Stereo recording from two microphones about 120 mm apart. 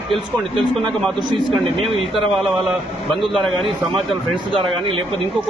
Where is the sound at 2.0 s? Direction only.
Centre (ahead or behind).